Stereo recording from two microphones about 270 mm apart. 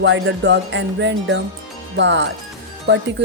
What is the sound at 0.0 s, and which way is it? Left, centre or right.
Speech, right.